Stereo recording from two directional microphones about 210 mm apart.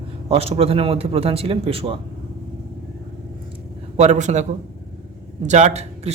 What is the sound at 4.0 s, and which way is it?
A man's voice, 35° right (ahead or behind).